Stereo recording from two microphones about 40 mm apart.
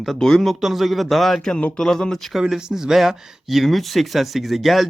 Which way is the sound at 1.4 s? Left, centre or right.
Centre.